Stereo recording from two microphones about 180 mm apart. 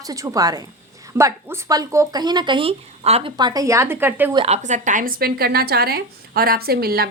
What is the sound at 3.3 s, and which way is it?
Speech, 20° right (ahead or behind).